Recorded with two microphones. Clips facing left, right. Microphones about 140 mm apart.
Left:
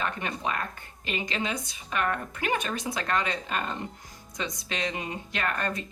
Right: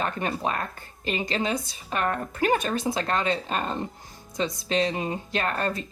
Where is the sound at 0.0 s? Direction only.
35° right (ahead or behind).